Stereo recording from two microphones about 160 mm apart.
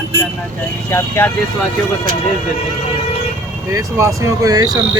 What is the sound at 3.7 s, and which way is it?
Speech, 20° right (ahead or behind).